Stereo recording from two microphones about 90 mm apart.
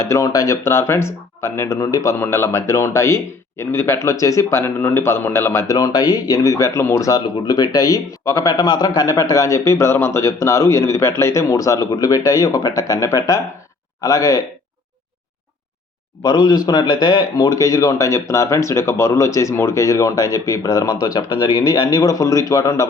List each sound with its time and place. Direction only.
0.0 s speech: 30° left (ahead or behind)
2.1 s speech: 25° left (ahead or behind)
5.6 s speech: 45° left (ahead or behind)
7.1 s speech: 45° left (ahead or behind)
8.5 s speech: 50° left (ahead or behind)
16.2 s speech: 45° left (ahead or behind)